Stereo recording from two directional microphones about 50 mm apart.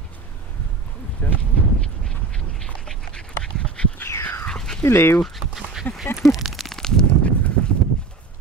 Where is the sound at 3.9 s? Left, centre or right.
Left.